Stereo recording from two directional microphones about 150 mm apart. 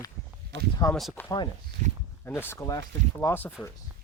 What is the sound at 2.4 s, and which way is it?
Speech, 15° left (ahead or behind).